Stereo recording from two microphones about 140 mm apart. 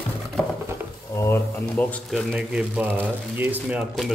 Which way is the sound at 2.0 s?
Centre (ahead or behind).